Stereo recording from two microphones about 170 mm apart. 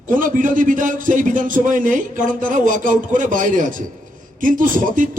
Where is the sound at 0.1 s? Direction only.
50° right (ahead or behind).